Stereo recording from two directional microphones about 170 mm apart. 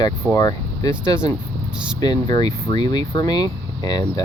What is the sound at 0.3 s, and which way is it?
Speech, 20° left (ahead or behind).